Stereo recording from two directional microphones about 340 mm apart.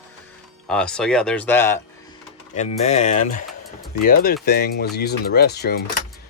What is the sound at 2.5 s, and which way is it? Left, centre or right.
Speech, centre.